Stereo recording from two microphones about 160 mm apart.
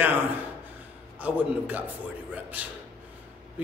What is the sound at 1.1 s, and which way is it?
Speech, 10° right (ahead or behind).